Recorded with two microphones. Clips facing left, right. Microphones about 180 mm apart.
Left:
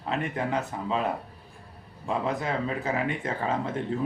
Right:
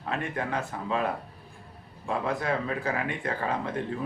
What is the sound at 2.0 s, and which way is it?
Speech, 20° left (ahead or behind).